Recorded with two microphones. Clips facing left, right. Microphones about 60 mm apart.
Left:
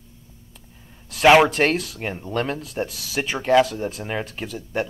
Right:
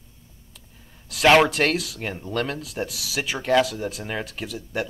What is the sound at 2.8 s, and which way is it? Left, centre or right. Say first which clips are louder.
Speech: left 2 dB; left.